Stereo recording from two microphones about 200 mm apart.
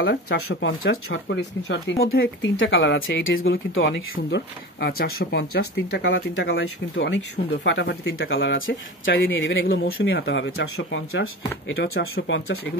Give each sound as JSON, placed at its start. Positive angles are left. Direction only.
{"t": 0.0, "sound": "speech", "side_deg": 55}
{"t": 0.5, "sound": "speech", "side_deg": 75}